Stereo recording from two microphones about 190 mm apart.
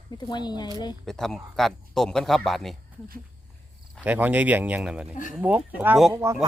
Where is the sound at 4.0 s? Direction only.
10° right (ahead or behind).